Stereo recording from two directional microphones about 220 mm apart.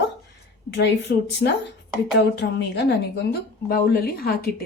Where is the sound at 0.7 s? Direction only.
50° left (ahead or behind).